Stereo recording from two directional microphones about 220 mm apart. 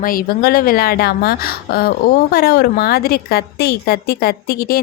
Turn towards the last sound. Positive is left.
turn(degrees=40)  # may be behind; listen again after turning